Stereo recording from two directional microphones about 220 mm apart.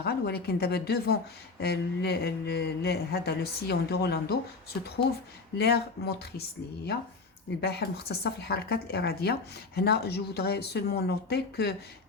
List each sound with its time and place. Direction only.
0.0 s a woman's voice: 45° left (ahead or behind)
7.6 s a woman's voice: 45° left (ahead or behind)